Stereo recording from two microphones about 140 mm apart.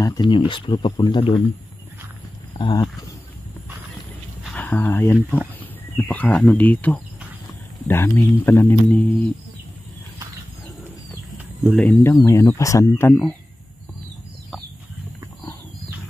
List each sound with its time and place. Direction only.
0.0 s speech: 30° left (ahead or behind)
2.6 s speech: 30° left (ahead or behind)
4.6 s speech: 10° left (ahead or behind)
11.7 s speech: 10° left (ahead or behind)